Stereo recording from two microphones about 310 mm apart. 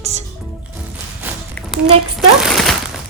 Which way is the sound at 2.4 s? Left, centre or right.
Centre.